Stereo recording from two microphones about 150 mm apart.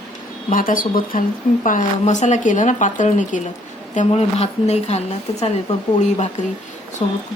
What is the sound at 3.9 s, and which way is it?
A woman's voice, 45° left (ahead or behind).